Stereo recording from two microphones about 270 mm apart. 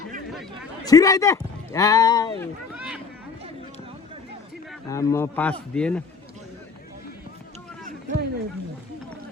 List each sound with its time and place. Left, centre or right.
0.3 s speech: centre
0.9 s speech: centre
2.7 s boat: centre
4.9 s speech: centre
7.9 s run: right